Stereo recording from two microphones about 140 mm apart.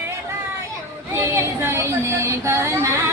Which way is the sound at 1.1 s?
20° right (ahead or behind).